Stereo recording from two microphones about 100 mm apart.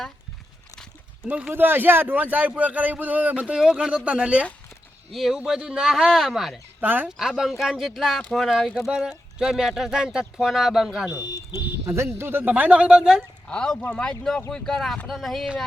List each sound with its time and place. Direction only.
1.2 s speech: 15° right (ahead or behind)
3.5 s speech: 5° right (ahead or behind)
6.7 s speech: 20° right (ahead or behind)
7.1 s speech: 5° right (ahead or behind)
11.2 s speech: 45° left (ahead or behind)
11.5 s a sound: 25° right (ahead or behind)
12.1 s speech: 20° right (ahead or behind)
13.5 s speech: 10° left (ahead or behind)